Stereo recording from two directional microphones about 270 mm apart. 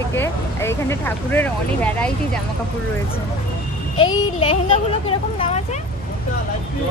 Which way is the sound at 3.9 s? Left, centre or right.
Centre.